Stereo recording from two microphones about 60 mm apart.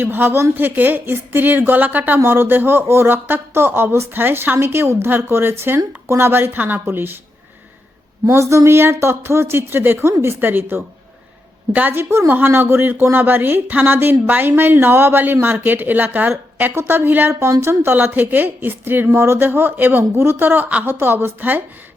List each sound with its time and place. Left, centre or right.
0.0 s speech: right
0.5 s speech: right
8.3 s speech: right
11.7 s a woman's voice: right
11.9 s speech: right
17.4 s speech: right
17.9 s speech: right
20.0 s speech: right